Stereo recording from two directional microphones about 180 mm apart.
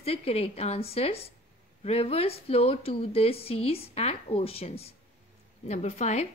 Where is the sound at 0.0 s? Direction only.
35° left (ahead or behind).